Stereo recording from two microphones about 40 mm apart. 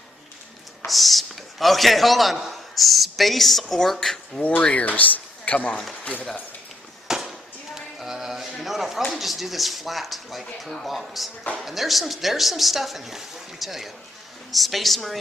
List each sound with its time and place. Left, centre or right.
0.9 s a man's voice: centre
4.6 s speech: left
7.1 s a sound: centre
7.9 s music: centre
8.5 s a sound: centre
9.1 s a woman's voice: centre